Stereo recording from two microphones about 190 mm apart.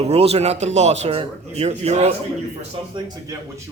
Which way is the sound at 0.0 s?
30° right (ahead or behind).